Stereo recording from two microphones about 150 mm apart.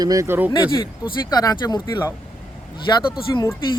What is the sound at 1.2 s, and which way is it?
Speech, 25° left (ahead or behind).